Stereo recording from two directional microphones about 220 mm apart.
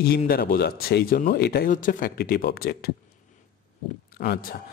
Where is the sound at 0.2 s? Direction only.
40° left (ahead or behind).